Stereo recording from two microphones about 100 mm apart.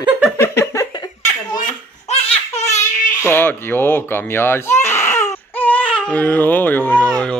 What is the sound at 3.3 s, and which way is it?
Speech, 20° left (ahead or behind).